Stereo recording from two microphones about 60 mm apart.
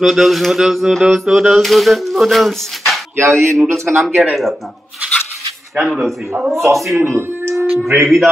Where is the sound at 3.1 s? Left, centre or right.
Right.